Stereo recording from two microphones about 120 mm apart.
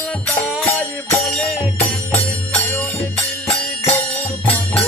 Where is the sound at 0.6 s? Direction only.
60° left (ahead or behind).